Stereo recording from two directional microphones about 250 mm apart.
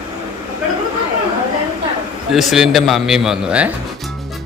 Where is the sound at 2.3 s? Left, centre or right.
Centre.